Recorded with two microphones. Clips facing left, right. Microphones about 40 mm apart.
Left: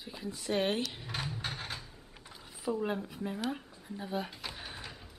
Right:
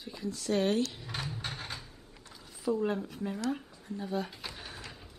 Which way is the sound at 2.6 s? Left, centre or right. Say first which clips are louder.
Right 3 dB; centre.